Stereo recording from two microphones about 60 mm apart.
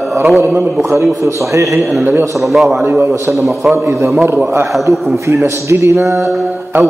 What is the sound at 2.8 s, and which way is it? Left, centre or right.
Speech, right.